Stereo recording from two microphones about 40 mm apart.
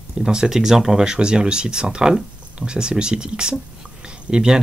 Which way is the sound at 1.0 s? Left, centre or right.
Right.